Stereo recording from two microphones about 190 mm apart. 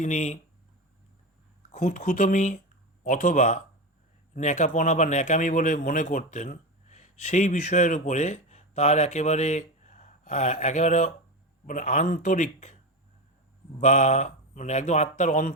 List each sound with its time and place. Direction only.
0.0 s speech: 40° left (ahead or behind)
1.7 s speech: 35° left (ahead or behind)
13.7 s speech: 40° left (ahead or behind)